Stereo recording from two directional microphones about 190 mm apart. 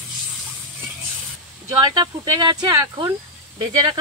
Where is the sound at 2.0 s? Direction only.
20° right (ahead or behind).